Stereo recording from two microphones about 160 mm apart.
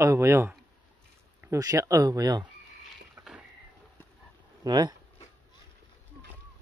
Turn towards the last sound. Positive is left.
turn(degrees=-25)  # may be behind; listen again after turning